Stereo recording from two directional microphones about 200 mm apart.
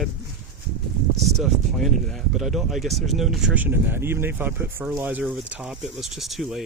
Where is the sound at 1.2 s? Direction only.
Centre (ahead or behind).